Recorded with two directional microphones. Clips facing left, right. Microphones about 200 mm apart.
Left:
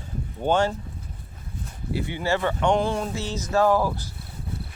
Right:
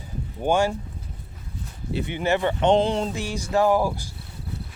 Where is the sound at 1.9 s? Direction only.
20° right (ahead or behind).